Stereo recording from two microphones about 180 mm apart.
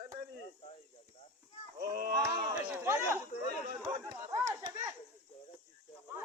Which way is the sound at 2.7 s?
15° right (ahead or behind).